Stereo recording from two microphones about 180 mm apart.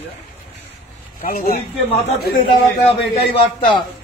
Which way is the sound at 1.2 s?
55° left (ahead or behind).